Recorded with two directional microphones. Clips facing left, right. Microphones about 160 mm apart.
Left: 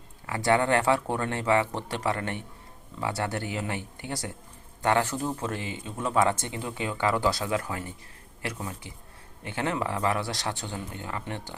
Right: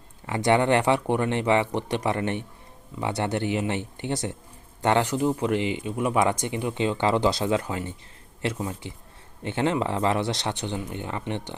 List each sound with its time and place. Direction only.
0.3 s speech: 25° right (ahead or behind)